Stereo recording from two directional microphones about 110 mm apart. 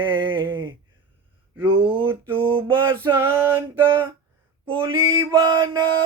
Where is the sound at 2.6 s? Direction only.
50° right (ahead or behind).